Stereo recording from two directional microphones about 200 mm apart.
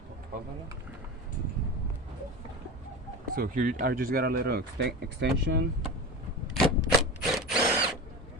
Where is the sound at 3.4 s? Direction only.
45° right (ahead or behind); by 5.7 s 60° right (ahead or behind).